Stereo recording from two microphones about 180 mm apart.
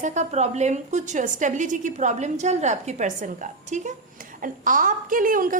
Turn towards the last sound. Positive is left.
turn(degrees=-50)  # may be behind; listen again after turning